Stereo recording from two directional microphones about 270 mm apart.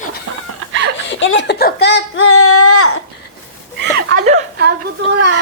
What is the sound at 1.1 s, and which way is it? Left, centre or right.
Speech, left.